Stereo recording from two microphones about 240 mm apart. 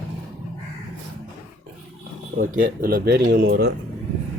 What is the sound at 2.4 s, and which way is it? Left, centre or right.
Speech, right.